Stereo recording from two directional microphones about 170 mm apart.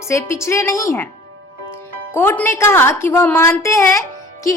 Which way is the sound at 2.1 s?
10° left (ahead or behind).